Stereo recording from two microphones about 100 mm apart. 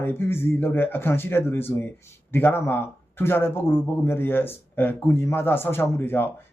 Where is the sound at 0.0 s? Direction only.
20° left (ahead or behind).